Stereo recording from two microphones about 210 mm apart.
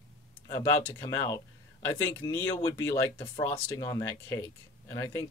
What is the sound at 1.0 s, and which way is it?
Speech, 15° left (ahead or behind).